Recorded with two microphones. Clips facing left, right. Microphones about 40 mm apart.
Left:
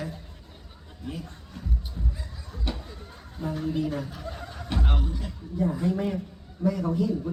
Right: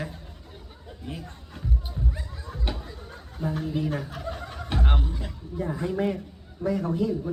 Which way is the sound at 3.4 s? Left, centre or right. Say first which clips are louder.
Right 2 dB; centre.